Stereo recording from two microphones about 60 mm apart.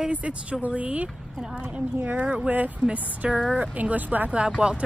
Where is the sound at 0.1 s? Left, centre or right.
Right.